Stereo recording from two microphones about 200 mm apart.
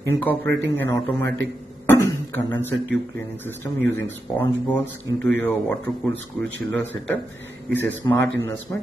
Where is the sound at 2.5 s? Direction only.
10° left (ahead or behind).